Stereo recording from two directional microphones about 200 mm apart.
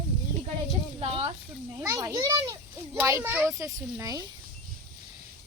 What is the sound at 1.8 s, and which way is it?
A child's voice, 15° right (ahead or behind).